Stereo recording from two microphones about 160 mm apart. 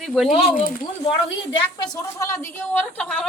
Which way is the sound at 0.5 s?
55° left (ahead or behind).